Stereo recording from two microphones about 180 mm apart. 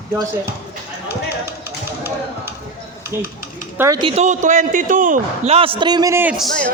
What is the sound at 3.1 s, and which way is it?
Speech, 15° right (ahead or behind).